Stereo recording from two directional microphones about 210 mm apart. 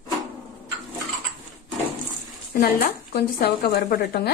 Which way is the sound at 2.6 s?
45° left (ahead or behind).